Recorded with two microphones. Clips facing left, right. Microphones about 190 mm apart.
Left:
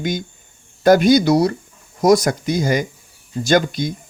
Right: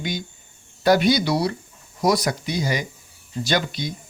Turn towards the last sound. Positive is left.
turn(degrees=45)  # may be behind; listen again after turning